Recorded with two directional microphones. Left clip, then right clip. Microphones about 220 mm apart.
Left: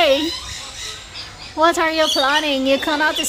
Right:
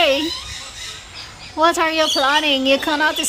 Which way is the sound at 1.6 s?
5° right (ahead or behind).